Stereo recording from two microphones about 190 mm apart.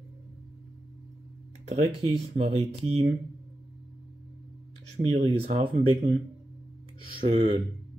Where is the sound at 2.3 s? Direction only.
35° right (ahead or behind).